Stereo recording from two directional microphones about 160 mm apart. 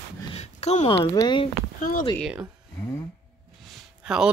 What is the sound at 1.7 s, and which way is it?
Speech, 55° left (ahead or behind).